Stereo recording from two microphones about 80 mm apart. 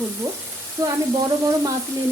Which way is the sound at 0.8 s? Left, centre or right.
Right.